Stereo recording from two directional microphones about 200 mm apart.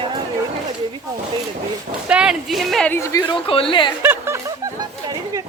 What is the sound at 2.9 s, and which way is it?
Speech, 15° left (ahead or behind).